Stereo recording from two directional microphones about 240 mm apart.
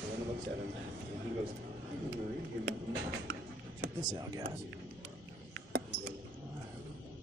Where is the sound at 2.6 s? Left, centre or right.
Right.